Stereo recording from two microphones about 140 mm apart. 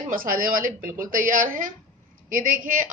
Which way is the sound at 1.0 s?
75° right (ahead or behind).